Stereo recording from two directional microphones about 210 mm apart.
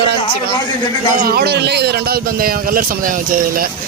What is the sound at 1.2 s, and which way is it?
Speech, 50° right (ahead or behind).